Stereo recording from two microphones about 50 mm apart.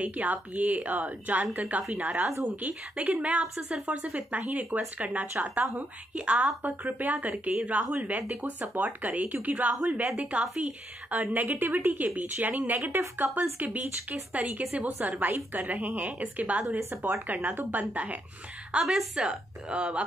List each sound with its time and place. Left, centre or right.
0.0 s a woman's voice: right